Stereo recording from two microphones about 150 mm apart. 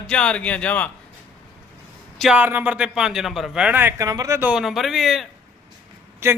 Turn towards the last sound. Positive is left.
turn(degrees=-15)  # may be behind; listen again after turning